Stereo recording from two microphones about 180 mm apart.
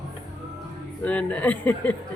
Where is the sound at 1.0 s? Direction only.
10° left (ahead or behind).